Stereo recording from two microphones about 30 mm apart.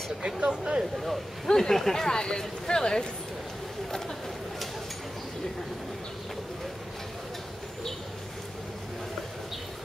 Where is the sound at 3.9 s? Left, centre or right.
Centre.